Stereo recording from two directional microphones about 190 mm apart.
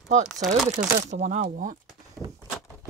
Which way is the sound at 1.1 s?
40° right (ahead or behind).